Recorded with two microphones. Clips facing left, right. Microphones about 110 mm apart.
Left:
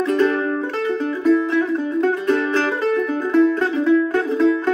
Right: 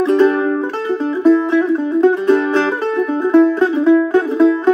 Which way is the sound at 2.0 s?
25° right (ahead or behind).